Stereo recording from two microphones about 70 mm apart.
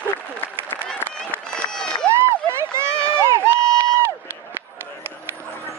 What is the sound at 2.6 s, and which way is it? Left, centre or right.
Run, right.